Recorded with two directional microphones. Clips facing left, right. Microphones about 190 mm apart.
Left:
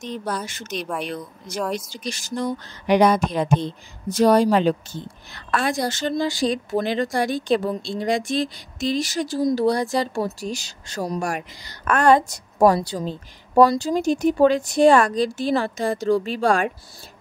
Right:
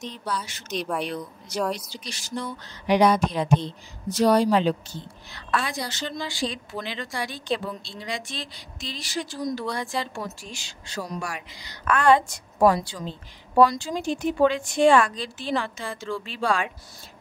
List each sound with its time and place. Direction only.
0.0 s a woman's voice: 50° left (ahead or behind)
9.4 s speech: 30° left (ahead or behind)